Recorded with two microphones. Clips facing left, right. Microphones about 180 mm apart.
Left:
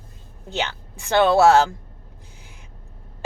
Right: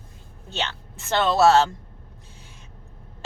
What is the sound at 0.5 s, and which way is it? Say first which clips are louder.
A woman's voice: left 3 dB; 15° left (ahead or behind).